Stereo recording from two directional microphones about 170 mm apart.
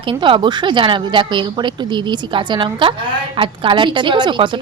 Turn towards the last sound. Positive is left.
turn(degrees=-30)  # may be behind; listen again after turning